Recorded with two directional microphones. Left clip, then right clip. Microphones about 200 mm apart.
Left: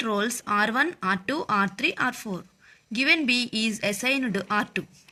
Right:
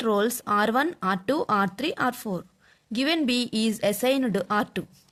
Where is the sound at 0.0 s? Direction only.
60° right (ahead or behind).